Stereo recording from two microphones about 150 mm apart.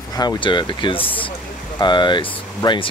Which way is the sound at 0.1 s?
25° left (ahead or behind).